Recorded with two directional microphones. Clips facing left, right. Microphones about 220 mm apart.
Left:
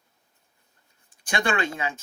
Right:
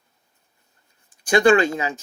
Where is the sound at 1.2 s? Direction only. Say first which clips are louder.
Right 11 dB; 40° right (ahead or behind).